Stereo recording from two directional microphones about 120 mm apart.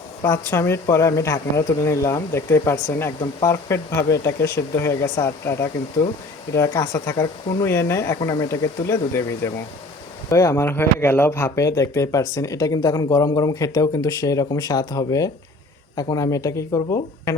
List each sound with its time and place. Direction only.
0.2 s speech: 25° left (ahead or behind)